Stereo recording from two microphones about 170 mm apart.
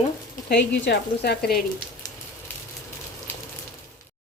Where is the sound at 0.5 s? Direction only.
75° left (ahead or behind).